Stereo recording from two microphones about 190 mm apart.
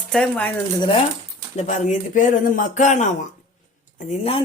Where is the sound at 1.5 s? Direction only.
40° left (ahead or behind).